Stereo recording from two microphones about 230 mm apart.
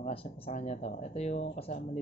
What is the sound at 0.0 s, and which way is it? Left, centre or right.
Speech, left.